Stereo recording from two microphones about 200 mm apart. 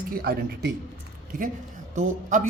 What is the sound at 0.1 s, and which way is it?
Speech, 50° right (ahead or behind).